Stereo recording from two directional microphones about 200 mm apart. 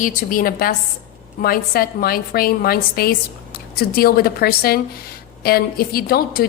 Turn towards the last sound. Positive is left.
turn(degrees=50)  # may be behind; listen again after turning